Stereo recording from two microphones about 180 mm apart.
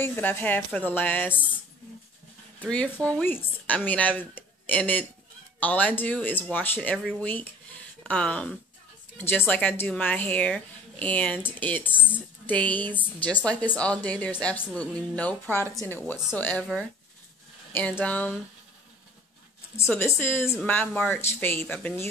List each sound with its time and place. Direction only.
0.0 s speech: 10° left (ahead or behind)
2.7 s speech: 5° left (ahead or behind)
17.7 s speech: 10° left (ahead or behind)
19.9 s speech: 10° left (ahead or behind)